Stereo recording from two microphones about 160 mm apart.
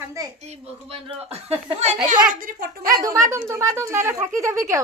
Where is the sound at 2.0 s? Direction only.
55° right (ahead or behind).